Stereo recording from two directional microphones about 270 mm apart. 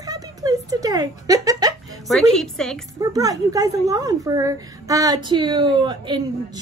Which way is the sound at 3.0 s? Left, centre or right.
Centre.